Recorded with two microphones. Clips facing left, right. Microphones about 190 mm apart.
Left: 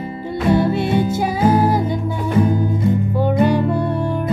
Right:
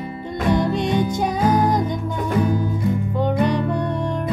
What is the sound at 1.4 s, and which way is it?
Music, 25° left (ahead or behind).